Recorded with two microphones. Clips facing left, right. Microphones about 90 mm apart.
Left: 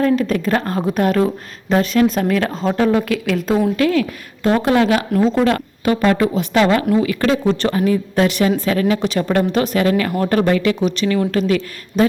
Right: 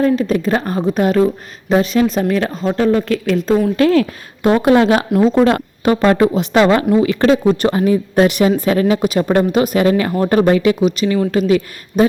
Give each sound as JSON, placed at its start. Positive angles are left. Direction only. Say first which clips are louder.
{"t": 0.0, "sound": "a woman's voice", "louder": "right 2 dB", "side_deg": -5}
{"t": 3.8, "sound": "a woman's voice", "louder": "right 4 dB", "side_deg": -35}
{"t": 4.4, "sound": "speech", "louder": "right 3 dB", "side_deg": -25}
{"t": 8.4, "sound": "speech", "louder": "right 3 dB", "side_deg": -20}